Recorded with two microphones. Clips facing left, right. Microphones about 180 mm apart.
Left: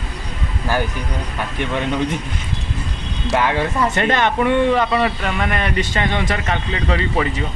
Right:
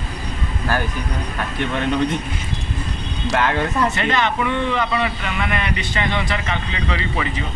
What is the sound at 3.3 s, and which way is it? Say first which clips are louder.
Speech: left 1 dB; 10° left (ahead or behind).